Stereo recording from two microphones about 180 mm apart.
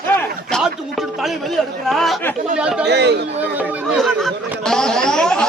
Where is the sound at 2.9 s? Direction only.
65° right (ahead or behind).